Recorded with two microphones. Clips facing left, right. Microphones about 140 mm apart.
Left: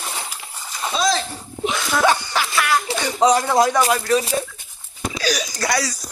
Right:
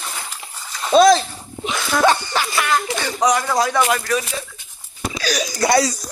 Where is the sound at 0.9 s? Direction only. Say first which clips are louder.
Right 11 dB; 65° right (ahead or behind).